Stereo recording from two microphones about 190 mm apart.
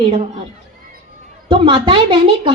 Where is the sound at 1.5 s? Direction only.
25° right (ahead or behind).